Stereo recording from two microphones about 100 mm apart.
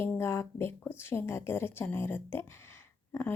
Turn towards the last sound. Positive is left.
turn(degrees=25)  # may be behind; listen again after turning